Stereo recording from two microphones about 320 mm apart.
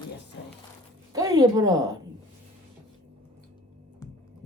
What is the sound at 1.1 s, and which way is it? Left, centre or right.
Speech, centre.